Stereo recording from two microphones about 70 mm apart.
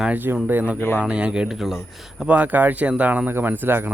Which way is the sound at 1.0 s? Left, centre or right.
Centre.